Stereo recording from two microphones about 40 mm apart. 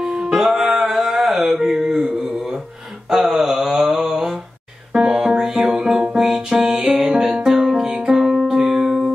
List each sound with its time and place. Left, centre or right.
0.0 s music: centre
1.6 s mantra: centre
3.1 s a sound: centre
4.9 s music: centre
5.4 s music: centre